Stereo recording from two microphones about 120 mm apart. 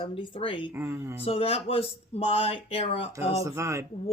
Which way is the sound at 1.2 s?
55° left (ahead or behind).